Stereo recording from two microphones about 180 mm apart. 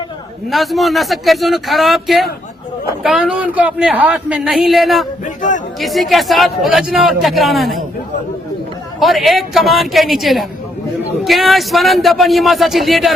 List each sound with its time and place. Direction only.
0.5 s speech: centre (ahead or behind)
5.2 s a sound: 45° left (ahead or behind)
5.8 s speech: centre (ahead or behind)
9.0 s speech: centre (ahead or behind)